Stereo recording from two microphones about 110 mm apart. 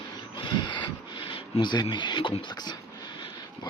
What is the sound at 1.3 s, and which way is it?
Speech, 50° left (ahead or behind).